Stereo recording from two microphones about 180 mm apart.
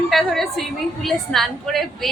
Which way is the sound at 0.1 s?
Centre (ahead or behind).